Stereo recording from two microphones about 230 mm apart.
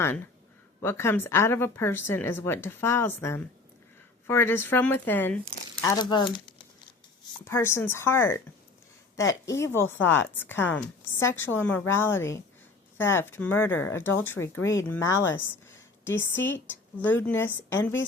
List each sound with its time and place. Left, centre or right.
0.8 s speech: centre
7.4 s speech: centre
9.5 s speech: centre